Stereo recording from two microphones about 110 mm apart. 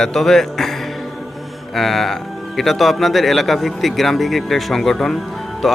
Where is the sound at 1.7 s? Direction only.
Centre (ahead or behind).